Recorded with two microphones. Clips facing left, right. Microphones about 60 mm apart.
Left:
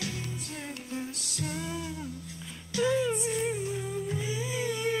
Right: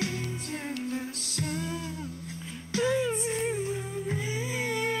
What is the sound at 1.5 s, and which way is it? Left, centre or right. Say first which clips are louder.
Music: right 2 dB; left.